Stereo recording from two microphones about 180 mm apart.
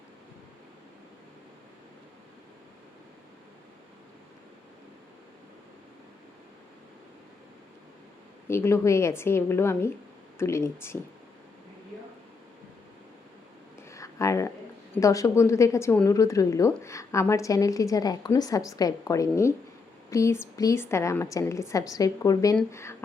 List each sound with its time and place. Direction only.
8.4 s a woman's voice: 15° left (ahead or behind)
13.9 s a sound: 15° left (ahead or behind)
14.9 s a woman's voice: 20° left (ahead or behind)